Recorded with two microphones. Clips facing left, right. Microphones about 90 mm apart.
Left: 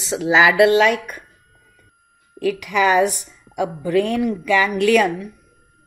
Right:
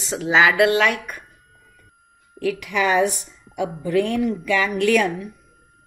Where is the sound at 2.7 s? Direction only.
70° left (ahead or behind).